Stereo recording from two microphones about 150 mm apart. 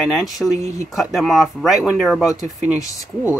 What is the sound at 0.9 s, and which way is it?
A man's voice, centre (ahead or behind).